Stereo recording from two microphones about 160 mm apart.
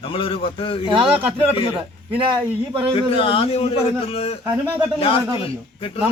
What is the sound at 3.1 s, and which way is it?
A man's voice, 35° left (ahead or behind).